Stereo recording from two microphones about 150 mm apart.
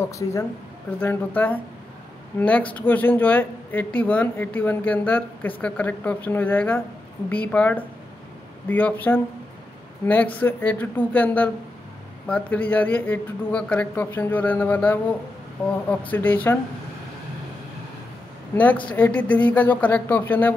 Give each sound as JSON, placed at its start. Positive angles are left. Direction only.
{"t": 0.1, "sound": "speech", "side_deg": 20}
{"t": 16.1, "sound": "speech", "side_deg": 10}
{"t": 18.5, "sound": "speech", "side_deg": 10}